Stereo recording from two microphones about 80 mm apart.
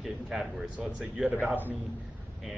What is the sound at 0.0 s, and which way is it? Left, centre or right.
A man's voice, centre.